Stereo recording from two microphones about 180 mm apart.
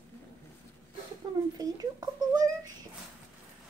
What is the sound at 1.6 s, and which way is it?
Speech, 20° right (ahead or behind).